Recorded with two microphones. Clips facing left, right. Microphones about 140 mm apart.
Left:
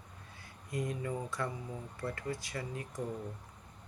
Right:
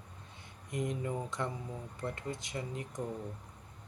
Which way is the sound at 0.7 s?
20° right (ahead or behind).